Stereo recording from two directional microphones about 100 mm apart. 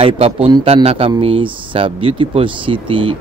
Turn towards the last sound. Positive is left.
turn(degrees=-60)  # may be behind; listen again after turning